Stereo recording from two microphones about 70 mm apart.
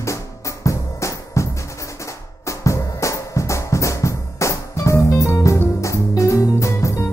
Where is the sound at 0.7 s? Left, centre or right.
Left.